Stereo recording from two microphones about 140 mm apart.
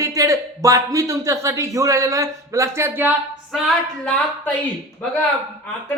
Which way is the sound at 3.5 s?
5° left (ahead or behind).